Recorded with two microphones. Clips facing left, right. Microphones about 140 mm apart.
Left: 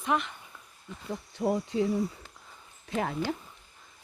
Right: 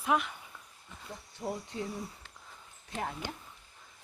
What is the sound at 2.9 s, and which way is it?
Insect, 90° left.